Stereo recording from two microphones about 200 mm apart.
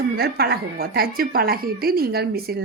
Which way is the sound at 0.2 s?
50° right (ahead or behind).